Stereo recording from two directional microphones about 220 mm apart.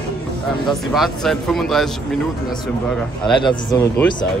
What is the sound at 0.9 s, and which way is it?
Speech, centre (ahead or behind).